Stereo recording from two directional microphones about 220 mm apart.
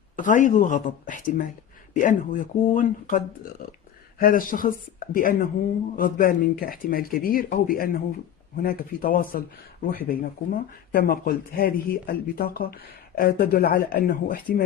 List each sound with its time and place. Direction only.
0.1 s speech: 35° left (ahead or behind)
4.2 s speech: 40° left (ahead or behind)